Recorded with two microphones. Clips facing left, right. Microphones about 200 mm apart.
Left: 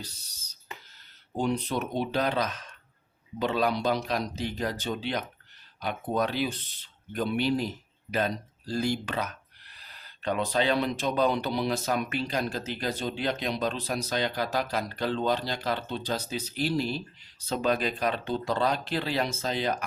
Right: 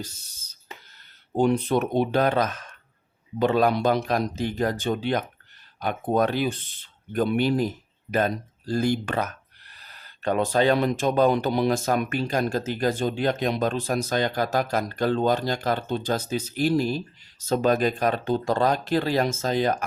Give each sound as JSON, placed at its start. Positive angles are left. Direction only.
{"t": 1.4, "sound": "speech", "side_deg": -55}